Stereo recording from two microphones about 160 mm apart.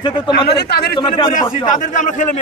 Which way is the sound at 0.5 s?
80° left.